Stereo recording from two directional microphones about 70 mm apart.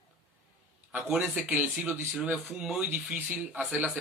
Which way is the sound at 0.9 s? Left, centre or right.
Centre.